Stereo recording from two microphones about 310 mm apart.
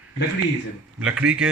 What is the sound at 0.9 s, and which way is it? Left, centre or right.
Speech, centre.